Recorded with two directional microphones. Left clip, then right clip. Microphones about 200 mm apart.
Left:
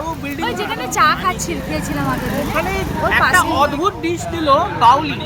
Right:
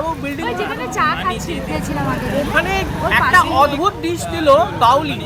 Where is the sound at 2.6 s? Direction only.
40° right (ahead or behind).